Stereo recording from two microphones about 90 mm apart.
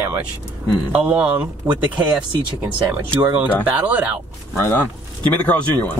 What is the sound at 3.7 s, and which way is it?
Speech, 20° right (ahead or behind).